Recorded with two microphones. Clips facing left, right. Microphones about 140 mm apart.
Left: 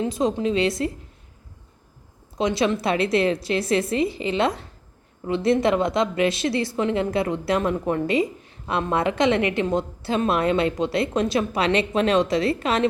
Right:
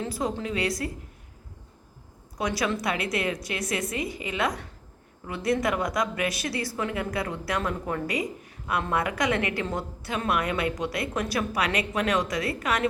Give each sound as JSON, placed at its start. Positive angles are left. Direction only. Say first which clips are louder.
{"t": 0.0, "sound": "a woman's voice", "louder": "left 7 dB", "side_deg": 20}
{"t": 2.4, "sound": "a woman's voice", "louder": "left 6 dB", "side_deg": 25}